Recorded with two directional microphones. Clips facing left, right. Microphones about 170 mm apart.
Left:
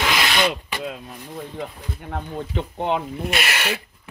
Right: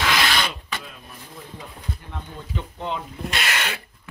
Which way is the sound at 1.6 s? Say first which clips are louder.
Left 5 dB; 60° left (ahead or behind).